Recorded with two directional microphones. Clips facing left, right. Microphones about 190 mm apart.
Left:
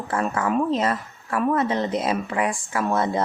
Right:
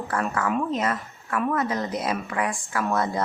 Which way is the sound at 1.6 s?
25° left (ahead or behind).